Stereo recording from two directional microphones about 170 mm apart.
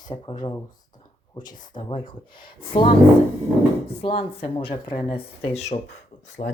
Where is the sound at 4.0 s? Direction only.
35° left (ahead or behind).